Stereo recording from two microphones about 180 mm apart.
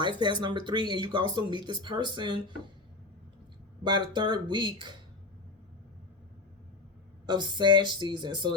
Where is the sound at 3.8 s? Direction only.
25° right (ahead or behind).